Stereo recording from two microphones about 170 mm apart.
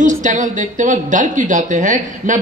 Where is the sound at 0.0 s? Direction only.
50° right (ahead or behind).